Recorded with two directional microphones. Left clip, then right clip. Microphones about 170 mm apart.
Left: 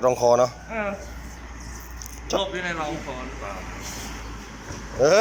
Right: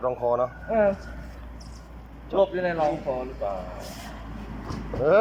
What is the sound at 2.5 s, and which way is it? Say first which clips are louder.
Speech: right 2 dB; 45° right (ahead or behind).